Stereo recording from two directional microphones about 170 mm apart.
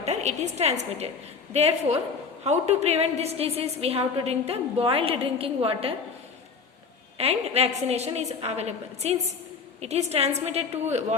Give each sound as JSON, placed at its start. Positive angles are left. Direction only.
{"t": 0.0, "sound": "a woman's voice", "side_deg": -40}
{"t": 7.2, "sound": "a woman's voice", "side_deg": -40}